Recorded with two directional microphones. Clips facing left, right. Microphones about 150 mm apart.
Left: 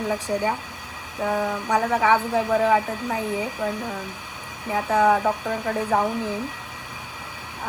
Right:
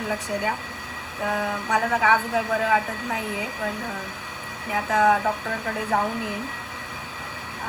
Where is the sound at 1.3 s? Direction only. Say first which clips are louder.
Left 2 dB; 10° left (ahead or behind).